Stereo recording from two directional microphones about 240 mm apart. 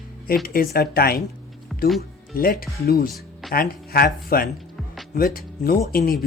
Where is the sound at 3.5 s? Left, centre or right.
Left.